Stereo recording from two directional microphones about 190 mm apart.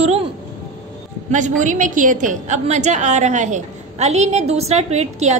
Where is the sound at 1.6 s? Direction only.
45° right (ahead or behind).